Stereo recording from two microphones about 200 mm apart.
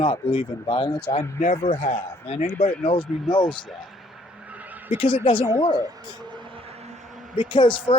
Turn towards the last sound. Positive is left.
turn(degrees=25)  # may be behind; listen again after turning